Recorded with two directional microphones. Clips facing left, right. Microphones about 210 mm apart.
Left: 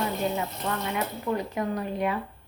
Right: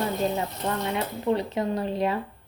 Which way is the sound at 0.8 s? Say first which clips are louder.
Right 5 dB; 25° right (ahead or behind).